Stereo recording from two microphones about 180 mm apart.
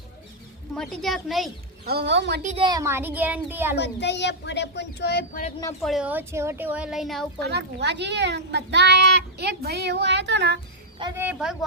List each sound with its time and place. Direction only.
0.7 s speech: 5° left (ahead or behind)
1.8 s a child's voice: 65° right (ahead or behind)
2.6 s a woman's voice: 25° right (ahead or behind)
3.8 s speech: 70° left (ahead or behind)
5.3 s speech: 45° left (ahead or behind)
5.8 s speech: 5° right (ahead or behind)
7.4 s a child's voice: 70° right (ahead or behind)
11.2 s speech: 5° right (ahead or behind)